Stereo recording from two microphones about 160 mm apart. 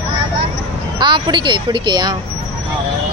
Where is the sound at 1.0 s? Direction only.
30° right (ahead or behind).